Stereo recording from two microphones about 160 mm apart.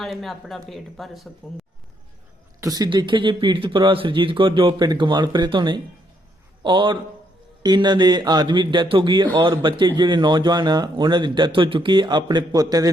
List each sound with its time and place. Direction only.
0.0 s speech: centre (ahead or behind)
2.6 s a man's voice: 25° right (ahead or behind)